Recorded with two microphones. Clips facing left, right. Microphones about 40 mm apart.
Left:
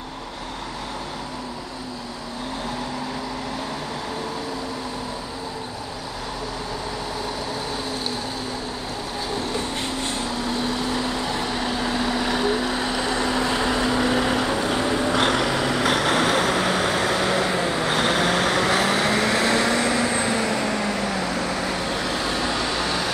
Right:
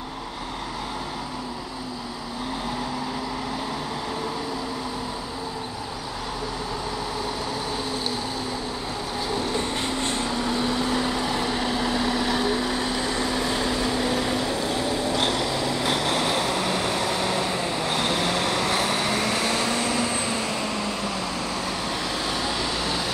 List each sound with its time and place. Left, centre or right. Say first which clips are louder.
10.2 s vehicle: even; centre
12.9 s vehicle: left 3 dB; left
22.2 s vehicle: left 3 dB; centre